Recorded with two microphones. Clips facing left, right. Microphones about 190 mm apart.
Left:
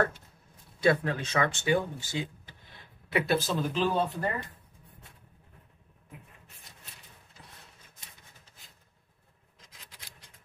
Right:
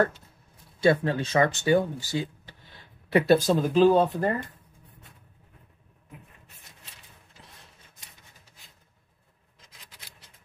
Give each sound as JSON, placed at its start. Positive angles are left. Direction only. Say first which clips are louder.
{"t": 0.7, "sound": "speech", "louder": "right 4 dB", "side_deg": -30}